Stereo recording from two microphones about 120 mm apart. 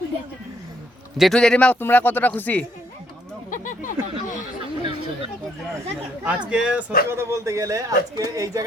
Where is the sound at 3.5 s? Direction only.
90° left.